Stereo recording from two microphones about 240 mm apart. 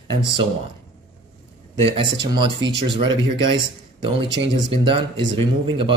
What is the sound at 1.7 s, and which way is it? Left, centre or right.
Speech, right.